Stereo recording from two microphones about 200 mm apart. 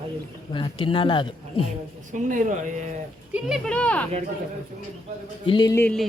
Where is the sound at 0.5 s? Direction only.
25° left (ahead or behind).